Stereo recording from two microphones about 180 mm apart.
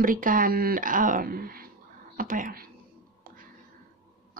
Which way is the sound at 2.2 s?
50° right (ahead or behind).